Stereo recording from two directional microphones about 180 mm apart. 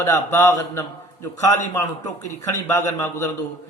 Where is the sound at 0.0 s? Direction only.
15° left (ahead or behind).